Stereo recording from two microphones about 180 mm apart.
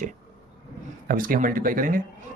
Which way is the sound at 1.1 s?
50° right (ahead or behind).